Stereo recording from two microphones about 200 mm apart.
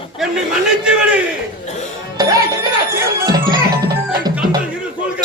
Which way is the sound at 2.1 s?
20° right (ahead or behind).